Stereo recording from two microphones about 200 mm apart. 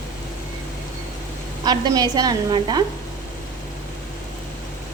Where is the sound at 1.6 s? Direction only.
20° right (ahead or behind).